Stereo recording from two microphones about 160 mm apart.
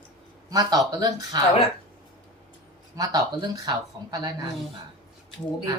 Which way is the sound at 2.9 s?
25° right (ahead or behind).